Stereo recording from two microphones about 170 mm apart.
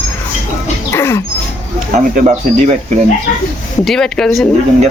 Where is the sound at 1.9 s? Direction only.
45° right (ahead or behind).